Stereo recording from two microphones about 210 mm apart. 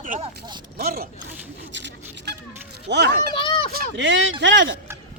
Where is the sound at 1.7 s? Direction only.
60° right (ahead or behind).